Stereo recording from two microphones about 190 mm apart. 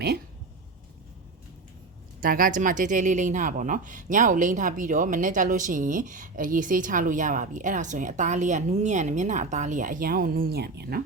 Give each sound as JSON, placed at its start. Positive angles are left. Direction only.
{"t": 2.2, "sound": "a woman's voice", "side_deg": -45}